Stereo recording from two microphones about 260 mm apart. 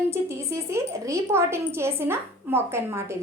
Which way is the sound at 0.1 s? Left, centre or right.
Centre.